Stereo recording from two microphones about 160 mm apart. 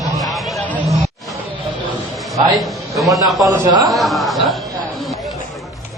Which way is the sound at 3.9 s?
Centre (ahead or behind).